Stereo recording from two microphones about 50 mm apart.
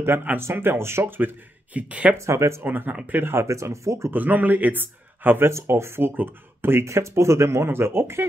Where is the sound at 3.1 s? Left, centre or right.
Right.